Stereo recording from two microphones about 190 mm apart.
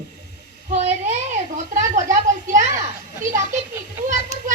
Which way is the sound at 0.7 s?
35° right (ahead or behind).